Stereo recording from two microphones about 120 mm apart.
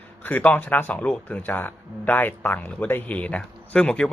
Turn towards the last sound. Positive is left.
turn(degrees=10)  # may be behind; listen again after turning